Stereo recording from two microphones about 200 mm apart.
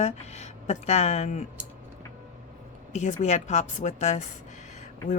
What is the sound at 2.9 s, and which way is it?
Speech, 35° left (ahead or behind).